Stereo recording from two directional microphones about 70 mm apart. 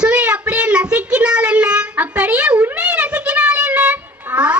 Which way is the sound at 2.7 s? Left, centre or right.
Centre.